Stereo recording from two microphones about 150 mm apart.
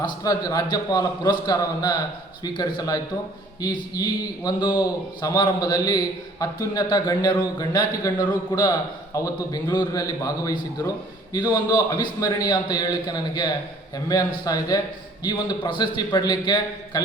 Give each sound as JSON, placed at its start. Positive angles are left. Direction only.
{"t": 0.0, "sound": "a man's voice", "side_deg": 25}